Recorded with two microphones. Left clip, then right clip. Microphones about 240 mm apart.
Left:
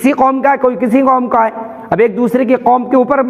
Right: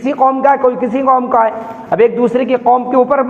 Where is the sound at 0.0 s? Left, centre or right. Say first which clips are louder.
Even; left.